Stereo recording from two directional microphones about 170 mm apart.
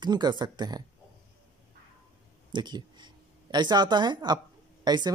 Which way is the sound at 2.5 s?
25° right (ahead or behind).